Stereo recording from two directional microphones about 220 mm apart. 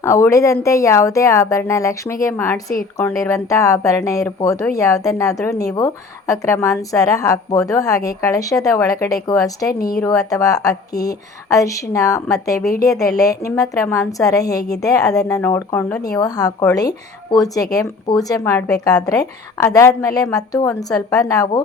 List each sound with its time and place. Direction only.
0.0 s speech: 15° left (ahead or behind)